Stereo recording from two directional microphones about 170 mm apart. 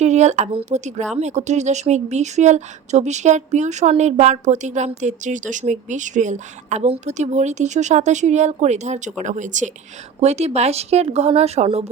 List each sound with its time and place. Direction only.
0.0 s speech: 40° right (ahead or behind)